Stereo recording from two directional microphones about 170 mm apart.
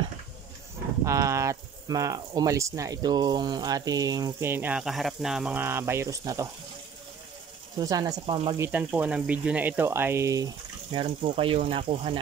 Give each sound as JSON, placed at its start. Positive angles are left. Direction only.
{"t": 1.0, "sound": "speech", "side_deg": -20}
{"t": 7.7, "sound": "speech", "side_deg": -20}